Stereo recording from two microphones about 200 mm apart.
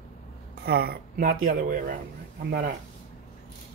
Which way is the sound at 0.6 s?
50° right (ahead or behind).